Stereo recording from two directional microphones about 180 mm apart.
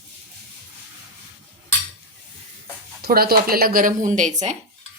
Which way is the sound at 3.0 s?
55° right (ahead or behind).